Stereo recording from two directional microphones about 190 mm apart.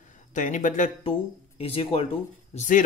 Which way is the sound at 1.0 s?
30° left (ahead or behind).